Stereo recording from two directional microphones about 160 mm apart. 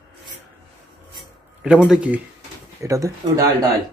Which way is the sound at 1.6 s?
5° right (ahead or behind).